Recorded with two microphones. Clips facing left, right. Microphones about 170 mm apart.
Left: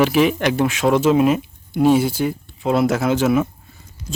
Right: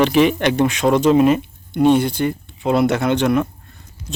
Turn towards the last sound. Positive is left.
turn(degrees=5)  # may be behind; listen again after turning